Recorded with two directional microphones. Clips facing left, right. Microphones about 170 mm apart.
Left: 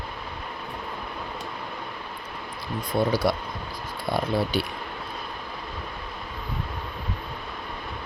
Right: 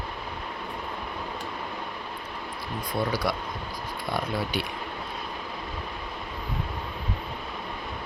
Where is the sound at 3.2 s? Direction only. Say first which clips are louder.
Left 4 dB; 30° left (ahead or behind).